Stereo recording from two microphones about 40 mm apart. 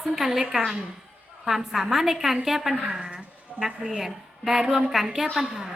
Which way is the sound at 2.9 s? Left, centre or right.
Right.